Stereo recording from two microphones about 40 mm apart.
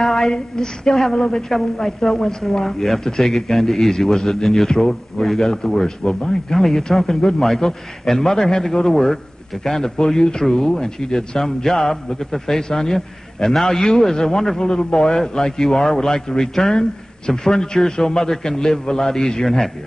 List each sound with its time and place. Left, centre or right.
0.0 s a man's voice: centre
5.2 s a man's voice: centre
7.4 s a man's voice: centre